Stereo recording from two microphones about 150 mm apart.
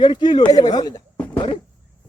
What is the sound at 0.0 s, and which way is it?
A man's voice, 30° left (ahead or behind).